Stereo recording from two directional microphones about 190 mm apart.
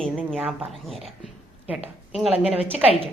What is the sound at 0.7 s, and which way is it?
Speech, centre (ahead or behind).